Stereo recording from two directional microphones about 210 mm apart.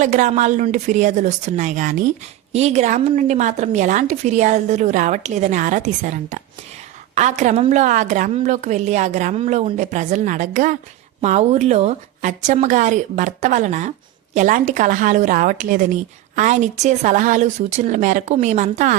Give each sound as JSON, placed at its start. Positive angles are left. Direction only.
{"t": 0.0, "sound": "a woman's voice", "side_deg": -35}